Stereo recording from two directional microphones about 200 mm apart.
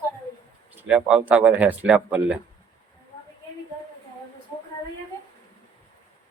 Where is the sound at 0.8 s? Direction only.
5° right (ahead or behind).